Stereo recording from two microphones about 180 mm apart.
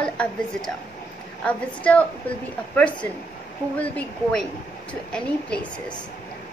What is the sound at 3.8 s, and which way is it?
A woman's voice, 5° left (ahead or behind).